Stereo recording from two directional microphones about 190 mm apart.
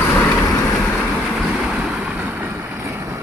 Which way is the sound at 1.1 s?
Centre (ahead or behind).